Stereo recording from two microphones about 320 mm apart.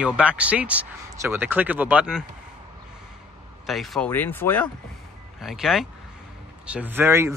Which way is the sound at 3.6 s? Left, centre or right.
Centre.